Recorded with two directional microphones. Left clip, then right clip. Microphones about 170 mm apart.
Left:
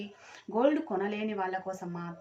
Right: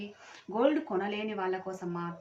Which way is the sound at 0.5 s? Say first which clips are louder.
Left 1 dB; centre (ahead or behind).